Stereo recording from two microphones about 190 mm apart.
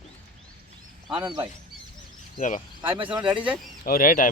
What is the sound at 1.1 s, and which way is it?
Speech, 25° right (ahead or behind).